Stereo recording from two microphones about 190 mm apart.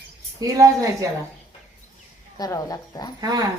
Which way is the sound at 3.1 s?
20° right (ahead or behind).